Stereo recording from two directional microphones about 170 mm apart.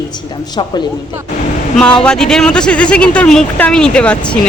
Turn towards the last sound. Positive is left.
turn(degrees=5)  # may be behind; listen again after turning